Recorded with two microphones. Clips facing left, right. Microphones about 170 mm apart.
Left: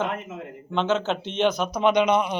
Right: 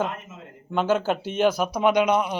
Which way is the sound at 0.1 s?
65° left (ahead or behind).